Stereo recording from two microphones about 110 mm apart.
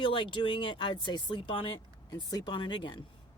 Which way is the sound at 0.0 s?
50° left (ahead or behind).